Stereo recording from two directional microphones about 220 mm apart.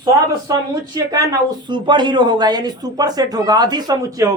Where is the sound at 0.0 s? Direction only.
15° right (ahead or behind).